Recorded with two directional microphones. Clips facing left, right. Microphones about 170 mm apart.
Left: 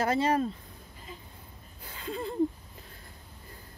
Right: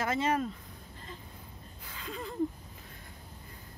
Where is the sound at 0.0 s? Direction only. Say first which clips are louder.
Left 4 dB; 35° left (ahead or behind).